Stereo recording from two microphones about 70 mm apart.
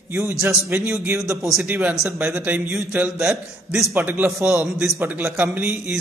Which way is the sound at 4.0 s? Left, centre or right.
Right.